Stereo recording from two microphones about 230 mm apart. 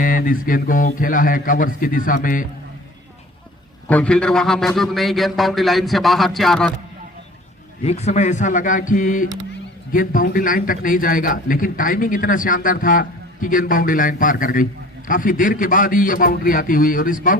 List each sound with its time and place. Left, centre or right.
0.0 s a man's voice: left
3.8 s a man's voice: centre
7.9 s a man's voice: left